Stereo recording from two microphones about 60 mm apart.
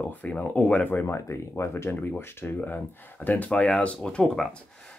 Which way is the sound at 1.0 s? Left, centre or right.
Left.